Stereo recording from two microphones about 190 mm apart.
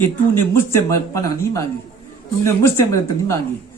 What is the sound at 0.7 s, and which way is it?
Speech, 15° left (ahead or behind).